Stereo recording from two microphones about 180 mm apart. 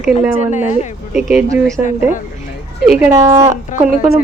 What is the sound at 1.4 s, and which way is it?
A woman's voice, 15° right (ahead or behind).